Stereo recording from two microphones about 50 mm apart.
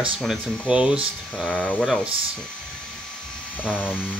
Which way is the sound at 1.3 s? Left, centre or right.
Centre.